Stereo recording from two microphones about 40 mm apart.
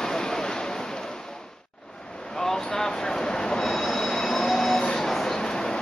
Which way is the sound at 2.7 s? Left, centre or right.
Centre.